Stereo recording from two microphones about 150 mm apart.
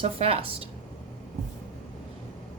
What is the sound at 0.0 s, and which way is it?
Speech, 40° right (ahead or behind).